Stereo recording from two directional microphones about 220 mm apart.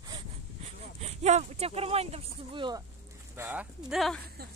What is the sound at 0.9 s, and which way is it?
Speech, 30° right (ahead or behind).